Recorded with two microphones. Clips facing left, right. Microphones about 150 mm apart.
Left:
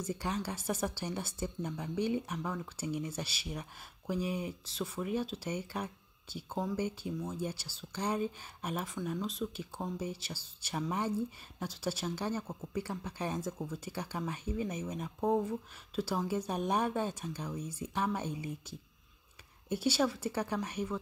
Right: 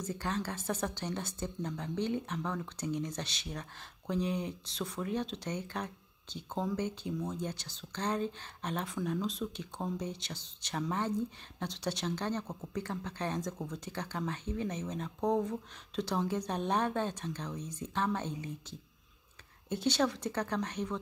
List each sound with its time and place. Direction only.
0.0 s speech: 10° left (ahead or behind)